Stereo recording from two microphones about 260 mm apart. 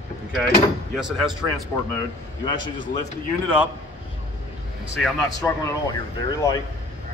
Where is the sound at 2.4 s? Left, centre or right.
Centre.